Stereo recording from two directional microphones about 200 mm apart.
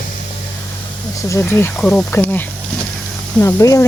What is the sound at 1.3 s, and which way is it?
Speech, 10° left (ahead or behind).